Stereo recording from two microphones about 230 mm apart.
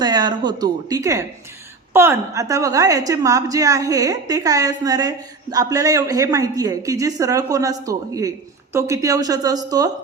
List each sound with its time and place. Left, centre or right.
0.0 s a woman's voice: centre